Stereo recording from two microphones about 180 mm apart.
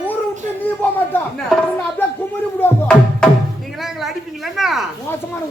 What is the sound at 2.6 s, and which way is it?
Music, 5° left (ahead or behind).